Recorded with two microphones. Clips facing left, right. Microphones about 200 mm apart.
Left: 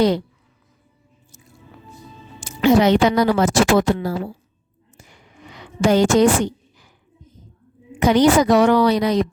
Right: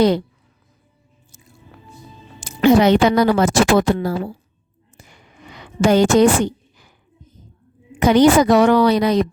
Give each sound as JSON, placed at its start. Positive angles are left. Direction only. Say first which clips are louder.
{"t": 2.6, "sound": "a woman's voice", "louder": "right 2 dB", "side_deg": -60}
{"t": 5.8, "sound": "a woman's voice", "louder": "right 2 dB", "side_deg": -60}
{"t": 7.9, "sound": "a woman's voice", "louder": "right 2 dB", "side_deg": -60}